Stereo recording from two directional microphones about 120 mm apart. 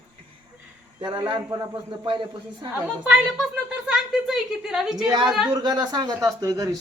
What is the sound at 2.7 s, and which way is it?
A woman's voice, 15° right (ahead or behind).